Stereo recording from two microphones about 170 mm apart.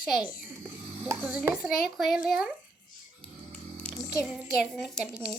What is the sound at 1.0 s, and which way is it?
A child's voice, 10° right (ahead or behind).